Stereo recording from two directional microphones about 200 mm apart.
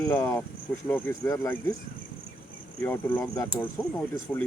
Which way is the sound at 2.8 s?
10° left (ahead or behind).